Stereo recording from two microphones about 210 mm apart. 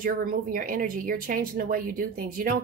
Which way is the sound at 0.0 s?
40° right (ahead or behind).